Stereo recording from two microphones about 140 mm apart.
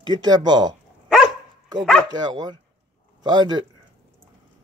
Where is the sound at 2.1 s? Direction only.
30° right (ahead or behind).